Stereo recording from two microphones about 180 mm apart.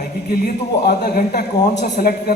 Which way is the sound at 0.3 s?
60° left (ahead or behind).